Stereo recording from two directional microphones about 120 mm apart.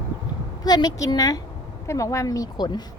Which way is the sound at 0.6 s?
35° left (ahead or behind).